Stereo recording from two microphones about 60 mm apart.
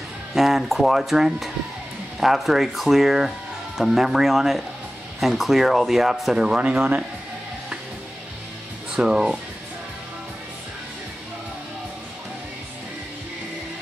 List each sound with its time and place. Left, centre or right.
0.3 s speech: centre
6.5 s speech: centre
8.9 s speech: centre